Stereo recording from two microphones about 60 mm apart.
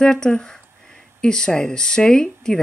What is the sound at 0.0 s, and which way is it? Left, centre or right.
Speech, centre.